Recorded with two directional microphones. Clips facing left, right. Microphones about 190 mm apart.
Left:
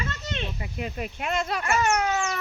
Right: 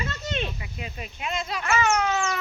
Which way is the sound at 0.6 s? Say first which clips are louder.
Left 5 dB; 50° left (ahead or behind).